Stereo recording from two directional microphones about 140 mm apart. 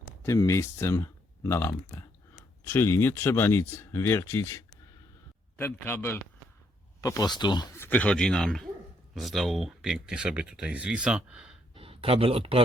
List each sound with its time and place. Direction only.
0.2 s speech: 20° left (ahead or behind)
7.0 s speech: 25° left (ahead or behind)
7.8 s speech: 10° left (ahead or behind); by 11.5 s 10° right (ahead or behind)
11.7 s speech: 40° right (ahead or behind)